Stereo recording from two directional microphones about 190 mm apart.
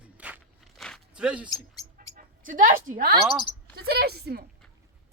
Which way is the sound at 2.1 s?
45° right (ahead or behind).